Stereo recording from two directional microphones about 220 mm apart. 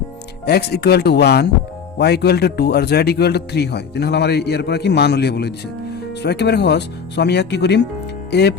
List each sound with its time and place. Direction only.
0.4 s a man's voice: 45° left (ahead or behind)